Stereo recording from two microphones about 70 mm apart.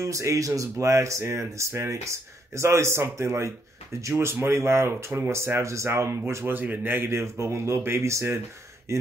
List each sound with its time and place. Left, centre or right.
0.0 s speech: right
7.1 s speech: right